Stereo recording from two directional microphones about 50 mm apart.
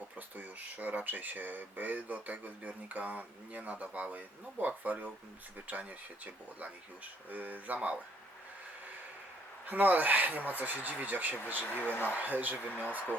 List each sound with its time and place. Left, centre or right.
0.2 s speech: right
9.6 s speech: right
11.6 s speech: left
12.1 s speech: right